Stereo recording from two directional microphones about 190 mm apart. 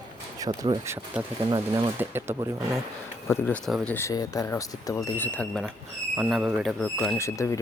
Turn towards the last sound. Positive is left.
turn(degrees=15)  # may be behind; listen again after turning